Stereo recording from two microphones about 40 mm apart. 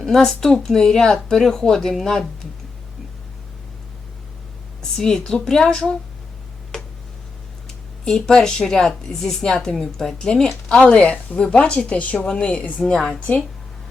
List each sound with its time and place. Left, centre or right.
0.0 s speech: centre
4.8 s speech: centre
8.0 s speech: centre; by 12.8 s left
12.8 s speech: centre